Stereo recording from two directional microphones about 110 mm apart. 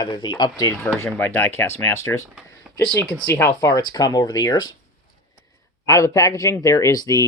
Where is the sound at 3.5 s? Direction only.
35° left (ahead or behind).